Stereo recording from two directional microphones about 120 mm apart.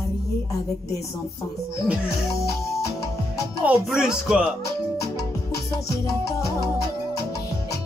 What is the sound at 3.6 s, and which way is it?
Speech, 5° right (ahead or behind).